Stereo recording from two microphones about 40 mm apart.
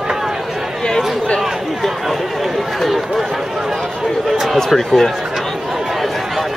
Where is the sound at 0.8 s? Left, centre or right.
Left.